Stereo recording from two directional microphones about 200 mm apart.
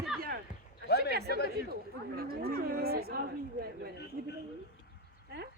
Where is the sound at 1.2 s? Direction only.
55° left (ahead or behind).